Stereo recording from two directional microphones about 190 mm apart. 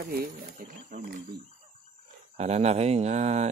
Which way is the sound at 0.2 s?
50° right (ahead or behind).